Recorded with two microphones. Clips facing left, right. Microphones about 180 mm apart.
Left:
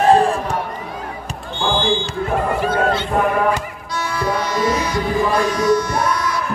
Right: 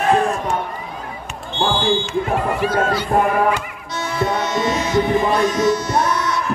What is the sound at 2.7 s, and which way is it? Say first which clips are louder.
Speech: left 1 dB; 25° left (ahead or behind).